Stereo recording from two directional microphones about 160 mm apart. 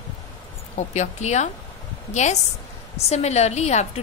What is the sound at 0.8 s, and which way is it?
A woman's voice, 45° left (ahead or behind).